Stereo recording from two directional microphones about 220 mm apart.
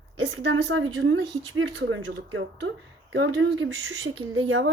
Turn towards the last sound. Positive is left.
turn(degrees=-60)  # may be behind; listen again after turning